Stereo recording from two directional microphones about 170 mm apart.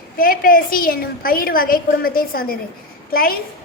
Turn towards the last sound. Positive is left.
turn(degrees=60)  # may be behind; listen again after turning